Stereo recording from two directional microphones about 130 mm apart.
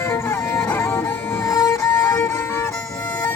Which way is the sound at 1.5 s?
25° left (ahead or behind).